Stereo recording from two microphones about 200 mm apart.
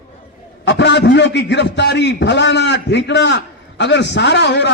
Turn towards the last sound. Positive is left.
turn(degrees=60)  # may be behind; listen again after turning